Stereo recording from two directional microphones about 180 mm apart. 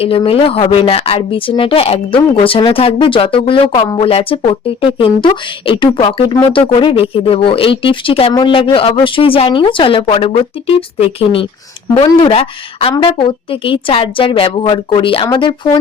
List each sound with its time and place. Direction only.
0.0 s speech: 30° left (ahead or behind)